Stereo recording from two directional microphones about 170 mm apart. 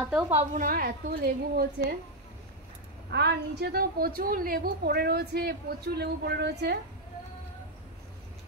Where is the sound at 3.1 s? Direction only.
85° right.